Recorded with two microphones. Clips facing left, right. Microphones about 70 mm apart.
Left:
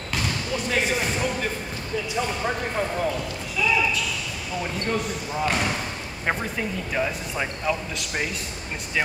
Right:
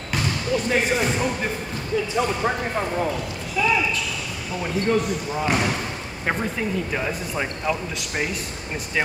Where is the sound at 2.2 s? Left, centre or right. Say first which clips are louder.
Right 4 dB; right.